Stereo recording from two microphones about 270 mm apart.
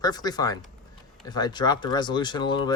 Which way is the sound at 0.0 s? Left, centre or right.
Centre.